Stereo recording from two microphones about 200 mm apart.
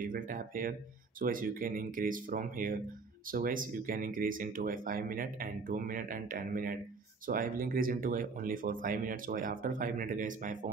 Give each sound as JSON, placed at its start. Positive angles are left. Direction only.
{"t": 0.0, "sound": "speech", "side_deg": -45}